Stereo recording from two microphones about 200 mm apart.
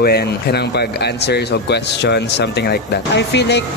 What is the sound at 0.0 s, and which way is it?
Speech, 55° left (ahead or behind).